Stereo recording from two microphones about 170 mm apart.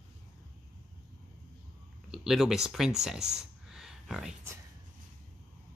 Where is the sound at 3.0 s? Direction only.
5° right (ahead or behind).